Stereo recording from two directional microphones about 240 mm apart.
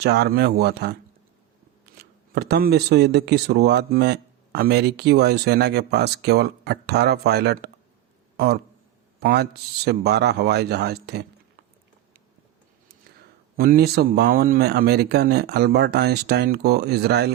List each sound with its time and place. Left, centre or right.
0.0 s speech: right
2.3 s speech: right
9.2 s speech: right
13.6 s speech: right